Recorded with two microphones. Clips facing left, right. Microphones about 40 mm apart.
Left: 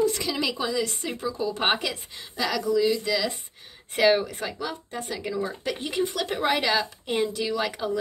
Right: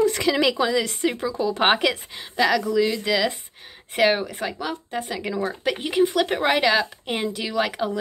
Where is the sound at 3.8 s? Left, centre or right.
Centre.